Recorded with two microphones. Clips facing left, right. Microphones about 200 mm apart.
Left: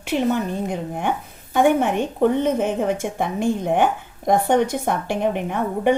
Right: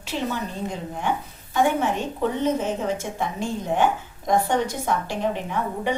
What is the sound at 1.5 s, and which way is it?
A woman's voice, 60° left (ahead or behind).